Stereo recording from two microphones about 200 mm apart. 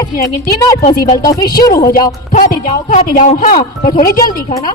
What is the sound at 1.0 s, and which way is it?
Speech, 20° left (ahead or behind).